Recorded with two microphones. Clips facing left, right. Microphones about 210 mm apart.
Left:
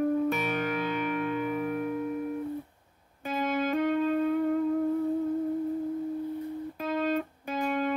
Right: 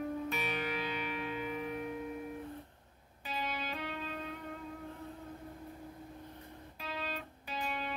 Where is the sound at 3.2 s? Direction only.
50° left (ahead or behind).